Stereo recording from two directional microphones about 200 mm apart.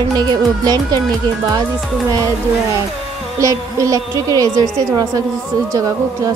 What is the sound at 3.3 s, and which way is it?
A woman's voice, 15° right (ahead or behind).